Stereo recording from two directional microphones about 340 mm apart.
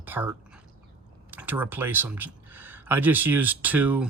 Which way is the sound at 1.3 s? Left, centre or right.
Centre.